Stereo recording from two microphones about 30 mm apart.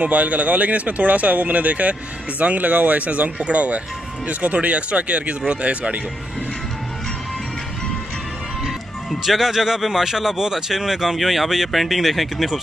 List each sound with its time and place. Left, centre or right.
0.0 s speech: right
3.1 s speech: right
9.2 s speech: centre
11.1 s speech: centre